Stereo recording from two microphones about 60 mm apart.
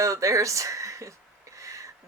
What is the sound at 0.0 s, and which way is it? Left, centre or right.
Speech, right.